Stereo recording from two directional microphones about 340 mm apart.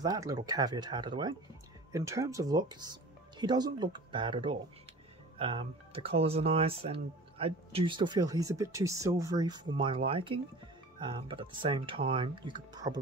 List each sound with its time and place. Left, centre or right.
0.0 s speech: centre